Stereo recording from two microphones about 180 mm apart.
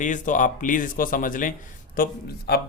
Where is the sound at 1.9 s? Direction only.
60° left (ahead or behind).